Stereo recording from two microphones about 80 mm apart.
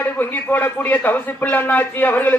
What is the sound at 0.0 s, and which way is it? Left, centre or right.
Speech, left.